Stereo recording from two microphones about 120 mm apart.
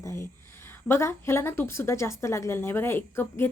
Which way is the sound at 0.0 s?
25° left (ahead or behind).